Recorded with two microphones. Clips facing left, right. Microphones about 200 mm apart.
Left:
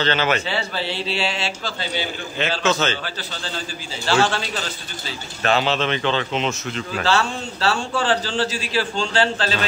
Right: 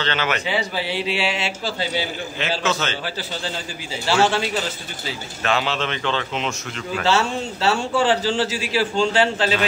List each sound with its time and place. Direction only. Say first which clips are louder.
0.0 s a man's voice: left 3 dB; 35° left (ahead or behind)
0.5 s speech: right 2 dB; 15° right (ahead or behind)
2.3 s a man's voice: left 3 dB; centre (ahead or behind)
4.0 s speech: right 1 dB; 10° right (ahead or behind)
5.4 s a man's voice: left 3 dB; 30° left (ahead or behind)
7.1 s speech: right 2 dB; 20° right (ahead or behind)